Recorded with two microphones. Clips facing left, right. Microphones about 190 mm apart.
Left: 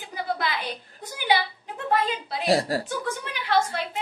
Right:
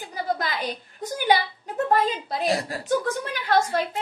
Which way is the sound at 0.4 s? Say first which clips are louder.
Even; 45° right (ahead or behind).